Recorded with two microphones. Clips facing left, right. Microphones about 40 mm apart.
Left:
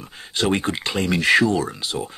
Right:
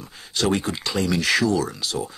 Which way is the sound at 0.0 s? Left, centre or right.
Left.